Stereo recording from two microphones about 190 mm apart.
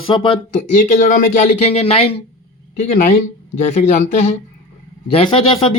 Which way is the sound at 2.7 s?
45° left (ahead or behind).